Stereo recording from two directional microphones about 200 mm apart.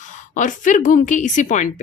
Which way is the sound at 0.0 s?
40° left (ahead or behind).